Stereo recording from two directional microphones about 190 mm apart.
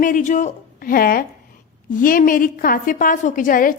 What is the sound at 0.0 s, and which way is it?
A woman's voice, 45° left (ahead or behind).